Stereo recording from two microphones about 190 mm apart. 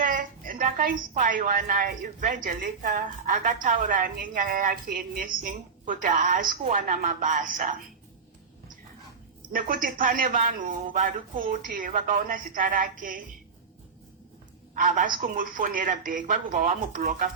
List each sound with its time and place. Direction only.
0.0 s a woman's voice: 45° right (ahead or behind)
9.5 s a woman's voice: 45° right (ahead or behind)
14.8 s a woman's voice: 45° right (ahead or behind)